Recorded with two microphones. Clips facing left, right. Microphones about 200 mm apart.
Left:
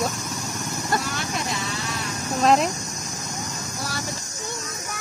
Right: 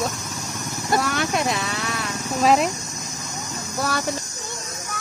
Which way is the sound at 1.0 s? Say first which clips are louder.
Right 6 dB; 65° right (ahead or behind).